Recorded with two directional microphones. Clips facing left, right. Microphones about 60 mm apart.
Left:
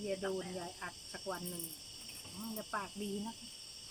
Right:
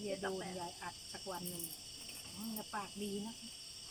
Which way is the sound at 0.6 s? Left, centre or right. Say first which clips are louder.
Left 1 dB; left.